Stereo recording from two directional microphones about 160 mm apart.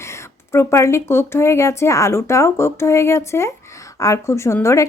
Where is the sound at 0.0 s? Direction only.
15° left (ahead or behind).